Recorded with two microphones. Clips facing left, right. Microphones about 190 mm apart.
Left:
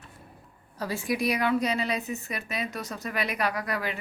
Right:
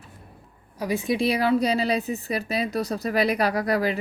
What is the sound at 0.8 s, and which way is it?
A woman's voice, 15° right (ahead or behind).